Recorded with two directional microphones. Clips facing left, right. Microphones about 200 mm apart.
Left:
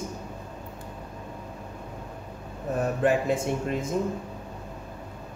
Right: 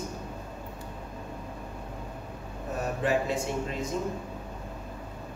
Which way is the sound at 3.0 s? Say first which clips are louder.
Left 3 dB; 50° left (ahead or behind).